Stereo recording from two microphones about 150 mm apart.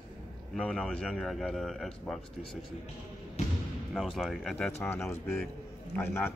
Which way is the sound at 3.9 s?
Centre (ahead or behind).